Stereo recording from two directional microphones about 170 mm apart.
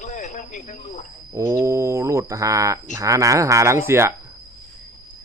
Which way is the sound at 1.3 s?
20° right (ahead or behind).